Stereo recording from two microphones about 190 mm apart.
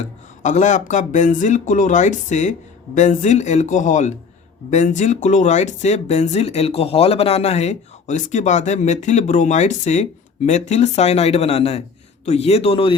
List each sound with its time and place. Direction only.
0.0 s speech: 40° left (ahead or behind)